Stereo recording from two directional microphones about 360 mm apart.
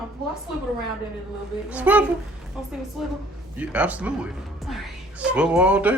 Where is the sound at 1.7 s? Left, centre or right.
Centre.